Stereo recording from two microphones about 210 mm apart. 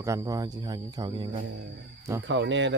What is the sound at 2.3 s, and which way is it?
Speech, 60° right (ahead or behind).